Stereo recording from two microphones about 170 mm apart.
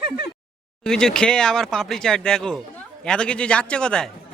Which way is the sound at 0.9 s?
5° left (ahead or behind).